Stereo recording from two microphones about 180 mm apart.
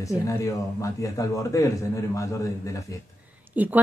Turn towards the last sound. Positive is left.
turn(degrees=-10)  # may be behind; listen again after turning